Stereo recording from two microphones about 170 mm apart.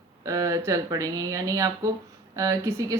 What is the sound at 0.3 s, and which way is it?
A woman's voice, 20° right (ahead or behind).